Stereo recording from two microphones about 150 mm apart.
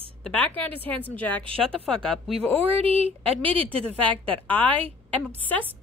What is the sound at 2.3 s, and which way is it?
Speech, 40° right (ahead or behind).